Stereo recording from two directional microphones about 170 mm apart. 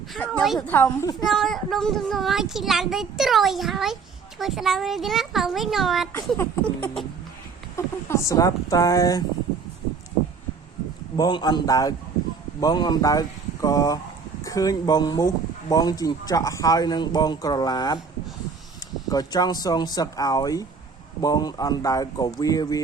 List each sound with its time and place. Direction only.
0.1 s a child's voice: 5° left (ahead or behind)
0.7 s a sound: 10° left (ahead or behind)
1.3 s a child's voice: centre (ahead or behind)
6.3 s a sound: 15° left (ahead or behind)
8.0 s speech: 15° left (ahead or behind)
11.2 s speech: 25° left (ahead or behind)
19.0 s speech: 20° left (ahead or behind)